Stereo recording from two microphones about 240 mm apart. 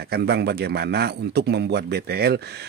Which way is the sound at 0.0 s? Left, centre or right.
Right.